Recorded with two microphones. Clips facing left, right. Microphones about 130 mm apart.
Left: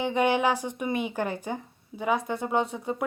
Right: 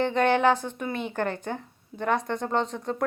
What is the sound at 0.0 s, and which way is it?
Speech, 10° left (ahead or behind).